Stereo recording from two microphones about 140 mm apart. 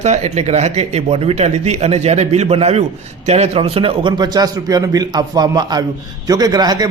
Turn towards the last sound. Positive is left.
turn(degrees=-30)  # may be behind; listen again after turning